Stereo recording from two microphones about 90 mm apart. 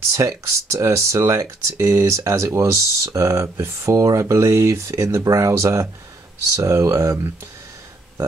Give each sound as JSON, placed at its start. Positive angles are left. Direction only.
{"t": 0.1, "sound": "speech", "side_deg": -35}